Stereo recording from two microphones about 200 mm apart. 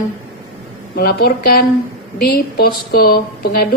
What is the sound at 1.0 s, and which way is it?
A woman's voice, 50° left (ahead or behind).